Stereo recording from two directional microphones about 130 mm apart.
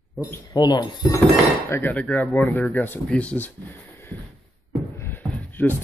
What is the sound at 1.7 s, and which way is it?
Speech, 15° left (ahead or behind).